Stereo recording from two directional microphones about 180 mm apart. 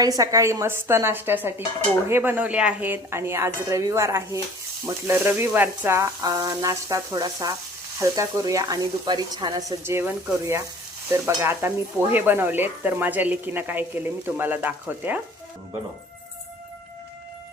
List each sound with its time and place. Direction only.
0.0 s speech: 20° right (ahead or behind)